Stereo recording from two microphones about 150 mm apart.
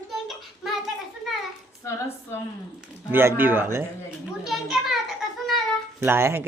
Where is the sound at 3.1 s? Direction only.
15° right (ahead or behind).